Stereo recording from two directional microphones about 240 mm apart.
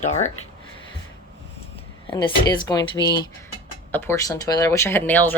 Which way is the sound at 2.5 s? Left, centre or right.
Centre.